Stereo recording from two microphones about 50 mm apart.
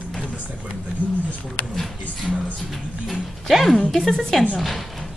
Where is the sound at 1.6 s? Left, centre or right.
Left.